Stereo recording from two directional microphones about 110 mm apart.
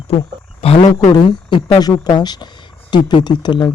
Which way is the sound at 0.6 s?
60° left (ahead or behind).